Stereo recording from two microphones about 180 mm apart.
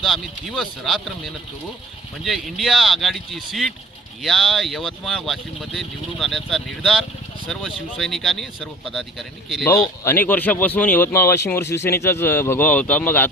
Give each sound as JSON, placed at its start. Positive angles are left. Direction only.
{"t": 0.0, "sound": "speech", "side_deg": 0}
{"t": 10.0, "sound": "speech", "side_deg": 10}